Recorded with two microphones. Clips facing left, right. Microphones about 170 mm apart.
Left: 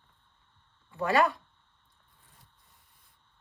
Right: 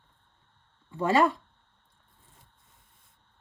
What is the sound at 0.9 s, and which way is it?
Speech, 25° right (ahead or behind).